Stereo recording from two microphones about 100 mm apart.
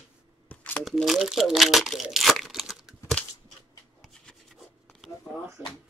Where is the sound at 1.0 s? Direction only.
5° right (ahead or behind).